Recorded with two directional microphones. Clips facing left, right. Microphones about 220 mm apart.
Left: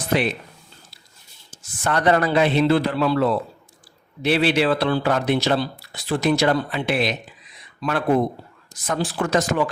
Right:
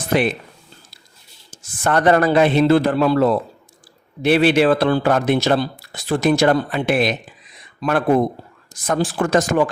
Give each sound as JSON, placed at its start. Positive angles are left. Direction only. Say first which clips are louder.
{"t": 0.1, "sound": "speech", "louder": "right 3 dB", "side_deg": -50}
{"t": 1.5, "sound": "speech", "louder": "right 4 dB", "side_deg": -50}